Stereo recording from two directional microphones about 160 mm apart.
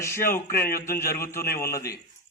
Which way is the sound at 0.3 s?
15° left (ahead or behind).